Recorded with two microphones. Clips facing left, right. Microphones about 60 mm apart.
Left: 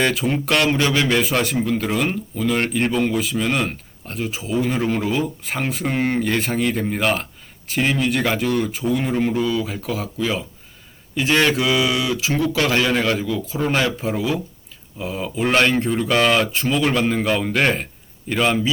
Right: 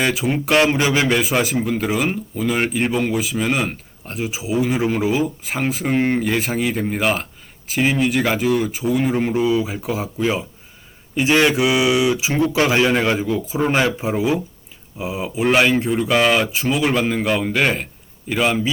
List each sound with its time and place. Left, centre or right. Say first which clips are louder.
0.0 s a man's voice: even; centre; by 13.4 s right
13.4 s a man's voice: right 2 dB; centre